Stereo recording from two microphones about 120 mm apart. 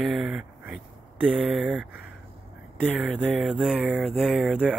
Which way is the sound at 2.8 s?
15° right (ahead or behind).